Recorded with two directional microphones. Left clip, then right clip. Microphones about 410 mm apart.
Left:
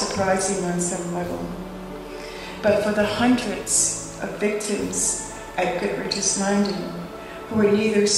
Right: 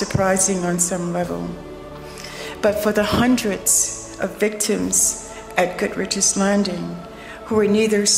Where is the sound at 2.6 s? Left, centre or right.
Right.